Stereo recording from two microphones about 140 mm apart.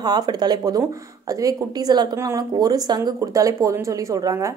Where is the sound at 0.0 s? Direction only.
30° right (ahead or behind).